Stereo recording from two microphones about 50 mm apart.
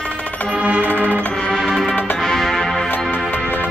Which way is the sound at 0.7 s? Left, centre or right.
Left.